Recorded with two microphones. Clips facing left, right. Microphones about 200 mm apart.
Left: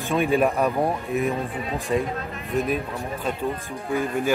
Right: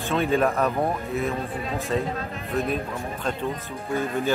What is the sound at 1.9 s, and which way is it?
Speech, 15° left (ahead or behind).